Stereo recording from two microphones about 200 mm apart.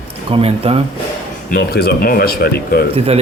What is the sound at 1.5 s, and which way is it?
Speech, 50° left (ahead or behind).